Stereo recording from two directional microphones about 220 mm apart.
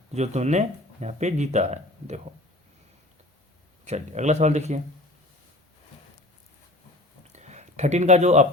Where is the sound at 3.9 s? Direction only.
30° right (ahead or behind).